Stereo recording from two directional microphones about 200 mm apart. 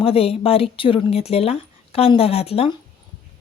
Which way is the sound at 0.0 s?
30° left (ahead or behind).